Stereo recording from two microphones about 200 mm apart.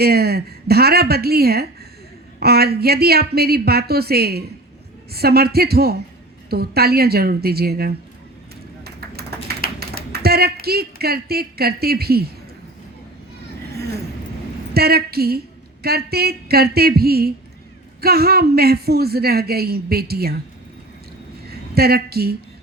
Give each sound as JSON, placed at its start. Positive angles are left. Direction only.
{"t": 0.0, "sound": "a woman's voice", "side_deg": -50}
{"t": 8.8, "sound": "typing", "side_deg": -50}
{"t": 10.1, "sound": "speech", "side_deg": -50}
{"t": 14.7, "sound": "a woman's voice", "side_deg": -50}
{"t": 21.4, "sound": "a sound", "side_deg": -50}